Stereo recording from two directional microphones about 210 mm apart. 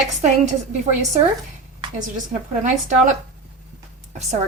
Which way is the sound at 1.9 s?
35° right (ahead or behind).